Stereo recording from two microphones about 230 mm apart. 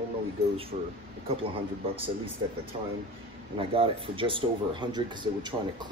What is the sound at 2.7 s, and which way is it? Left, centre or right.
Speech, right.